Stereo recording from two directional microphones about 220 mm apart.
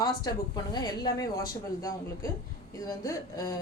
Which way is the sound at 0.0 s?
20° left (ahead or behind).